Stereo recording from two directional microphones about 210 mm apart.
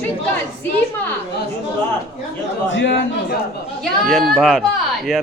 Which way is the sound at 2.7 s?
60° left (ahead or behind).